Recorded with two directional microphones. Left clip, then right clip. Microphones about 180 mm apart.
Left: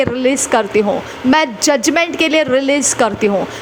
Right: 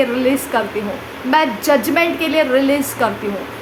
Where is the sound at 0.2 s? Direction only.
45° left (ahead or behind).